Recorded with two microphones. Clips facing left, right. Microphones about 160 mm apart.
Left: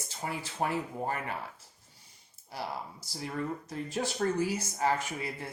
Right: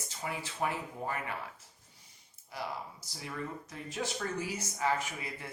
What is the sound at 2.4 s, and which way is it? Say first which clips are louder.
Speech: left 2 dB; 35° left (ahead or behind).